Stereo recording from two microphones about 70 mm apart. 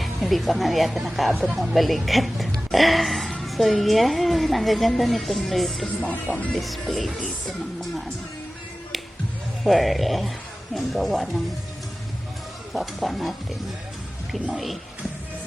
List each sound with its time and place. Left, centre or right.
0.0 s speech: centre
3.4 s music: centre
3.7 s speech: centre
5.8 s speech: left
6.5 s speech: centre
9.6 s speech: centre
12.7 s speech: centre
14.5 s speech: centre